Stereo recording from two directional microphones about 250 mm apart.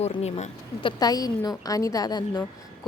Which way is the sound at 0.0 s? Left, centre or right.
Left.